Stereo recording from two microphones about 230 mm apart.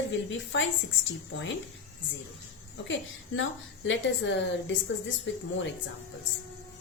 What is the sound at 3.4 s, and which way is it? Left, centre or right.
A woman's voice, left.